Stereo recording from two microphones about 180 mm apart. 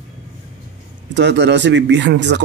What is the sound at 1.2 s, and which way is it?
Speech, 75° right (ahead or behind).